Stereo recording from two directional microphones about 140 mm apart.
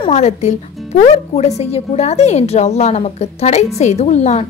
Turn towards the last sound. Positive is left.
turn(degrees=50)  # may be behind; listen again after turning